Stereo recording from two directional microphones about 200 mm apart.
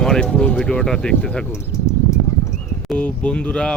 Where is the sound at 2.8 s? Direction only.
5° left (ahead or behind).